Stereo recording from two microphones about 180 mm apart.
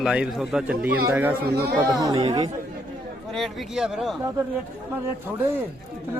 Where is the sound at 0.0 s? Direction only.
5° right (ahead or behind); by 2.5 s 25° right (ahead or behind).